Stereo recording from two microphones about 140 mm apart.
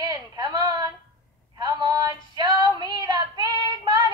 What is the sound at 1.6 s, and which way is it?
Female singing, 25° right (ahead or behind).